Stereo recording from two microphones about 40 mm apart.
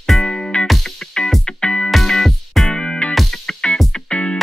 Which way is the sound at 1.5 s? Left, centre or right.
Left.